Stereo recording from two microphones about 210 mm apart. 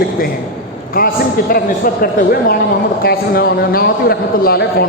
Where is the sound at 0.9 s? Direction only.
45° left (ahead or behind).